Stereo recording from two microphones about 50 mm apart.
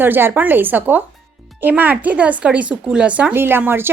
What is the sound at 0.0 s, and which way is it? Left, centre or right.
A woman's voice, right.